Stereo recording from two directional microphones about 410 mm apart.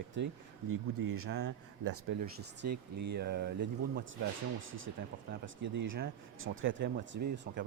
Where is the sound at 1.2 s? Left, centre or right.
Right.